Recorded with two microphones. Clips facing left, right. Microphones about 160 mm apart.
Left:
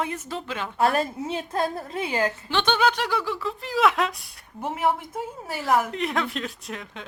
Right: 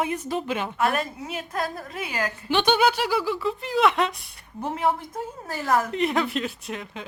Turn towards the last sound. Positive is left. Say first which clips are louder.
# right 2 dB
turn(degrees=0)  # may be behind; listen again after turning